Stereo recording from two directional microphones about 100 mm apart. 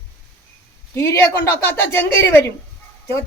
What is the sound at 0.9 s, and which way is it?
Speech, 25° left (ahead or behind).